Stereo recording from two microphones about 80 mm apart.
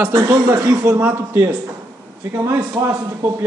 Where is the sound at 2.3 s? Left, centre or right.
Right.